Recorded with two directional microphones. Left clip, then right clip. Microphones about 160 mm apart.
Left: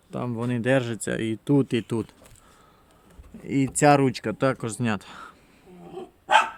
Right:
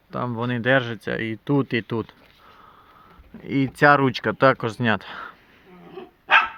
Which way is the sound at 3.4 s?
10° right (ahead or behind).